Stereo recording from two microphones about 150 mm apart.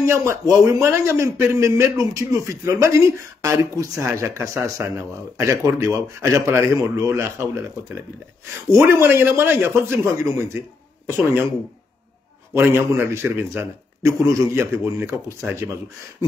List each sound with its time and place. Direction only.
0.0 s a man's voice: 20° right (ahead or behind)
12.5 s a man's voice: 15° right (ahead or behind)